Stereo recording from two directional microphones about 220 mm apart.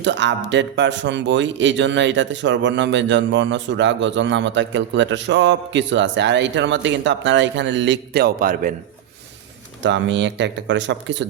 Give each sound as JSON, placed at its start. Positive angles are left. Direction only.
{"t": 0.0, "sound": "speech", "side_deg": -55}
{"t": 9.8, "sound": "speech", "side_deg": -55}